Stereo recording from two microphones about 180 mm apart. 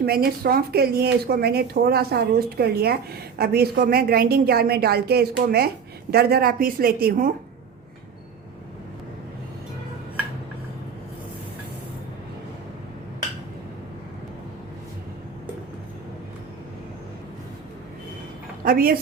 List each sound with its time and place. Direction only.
0.0 s speech: 55° right (ahead or behind)
18.6 s speech: 55° right (ahead or behind)